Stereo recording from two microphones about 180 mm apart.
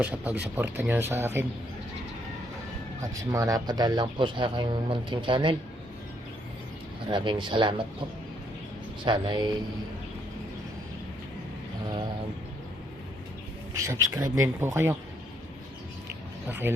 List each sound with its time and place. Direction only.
0.0 s speech: 10° right (ahead or behind)
3.0 s speech: 20° right (ahead or behind)
7.1 s speech: 25° right (ahead or behind)
9.0 s speech: 25° right (ahead or behind)
13.7 s speech: 15° right (ahead or behind)
16.5 s speech: 10° right (ahead or behind)